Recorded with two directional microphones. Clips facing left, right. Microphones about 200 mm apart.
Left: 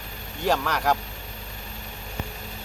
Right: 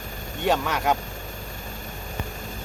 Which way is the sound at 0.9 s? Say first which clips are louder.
Right 4 dB; 45° right (ahead or behind).